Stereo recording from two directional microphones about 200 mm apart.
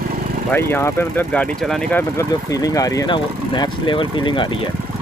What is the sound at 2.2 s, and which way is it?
Speech, 15° left (ahead or behind).